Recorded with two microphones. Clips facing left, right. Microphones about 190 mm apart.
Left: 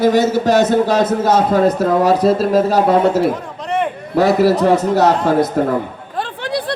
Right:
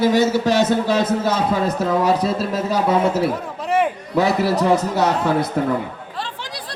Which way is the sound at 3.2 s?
Centre (ahead or behind).